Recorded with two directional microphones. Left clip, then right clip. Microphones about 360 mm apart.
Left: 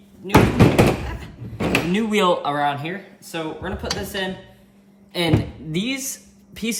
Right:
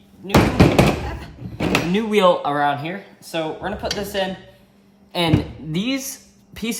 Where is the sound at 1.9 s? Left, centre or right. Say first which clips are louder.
Right 5 dB; centre.